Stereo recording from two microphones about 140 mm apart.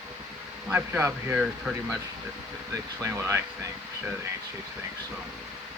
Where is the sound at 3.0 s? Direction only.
20° right (ahead or behind).